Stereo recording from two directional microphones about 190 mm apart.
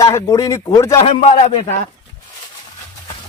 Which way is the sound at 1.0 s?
35° left (ahead or behind).